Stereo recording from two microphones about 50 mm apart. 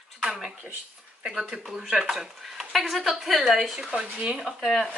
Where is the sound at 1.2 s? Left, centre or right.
Centre.